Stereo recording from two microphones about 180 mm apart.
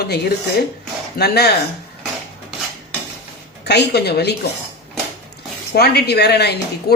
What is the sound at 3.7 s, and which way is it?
Speech, 65° left (ahead or behind).